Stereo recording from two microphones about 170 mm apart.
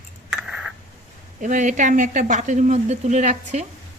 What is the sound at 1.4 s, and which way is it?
Speech, 50° right (ahead or behind).